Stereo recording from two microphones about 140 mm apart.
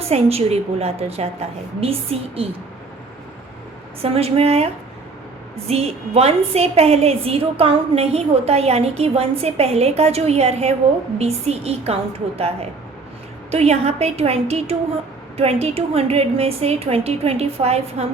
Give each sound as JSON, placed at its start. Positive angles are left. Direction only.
{"t": 0.0, "sound": "a woman's voice", "side_deg": -45}
{"t": 4.0, "sound": "a woman's voice", "side_deg": -45}